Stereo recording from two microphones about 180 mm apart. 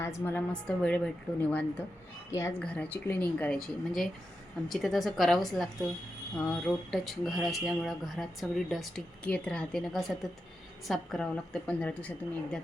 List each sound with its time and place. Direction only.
0.0 s a woman's voice: 15° left (ahead or behind)